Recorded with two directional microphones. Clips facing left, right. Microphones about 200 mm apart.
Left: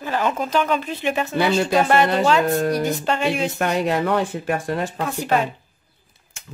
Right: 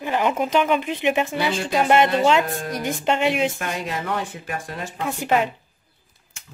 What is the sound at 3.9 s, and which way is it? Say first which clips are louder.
Speech: left 7 dB; 60° left (ahead or behind).